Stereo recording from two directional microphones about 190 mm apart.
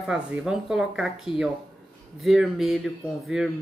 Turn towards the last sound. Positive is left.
turn(degrees=0)  # may be behind; listen again after turning